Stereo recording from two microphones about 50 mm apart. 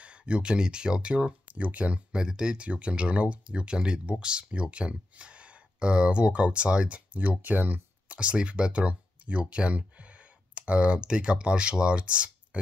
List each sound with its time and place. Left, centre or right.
0.0 s speech: right
1.6 s speech: right
2.1 s speech: centre; by 7.8 s right
8.1 s speech: right